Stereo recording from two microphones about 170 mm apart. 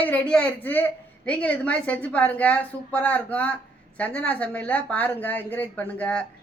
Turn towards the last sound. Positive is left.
turn(degrees=10)  # may be behind; listen again after turning